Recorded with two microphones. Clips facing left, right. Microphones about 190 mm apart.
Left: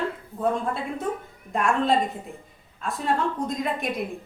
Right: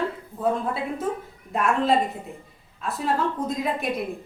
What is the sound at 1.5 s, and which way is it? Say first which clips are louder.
A woman's voice: right 1 dB; centre (ahead or behind).